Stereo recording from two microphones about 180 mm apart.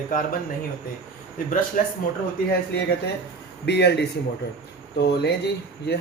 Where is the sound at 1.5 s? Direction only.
50° left (ahead or behind).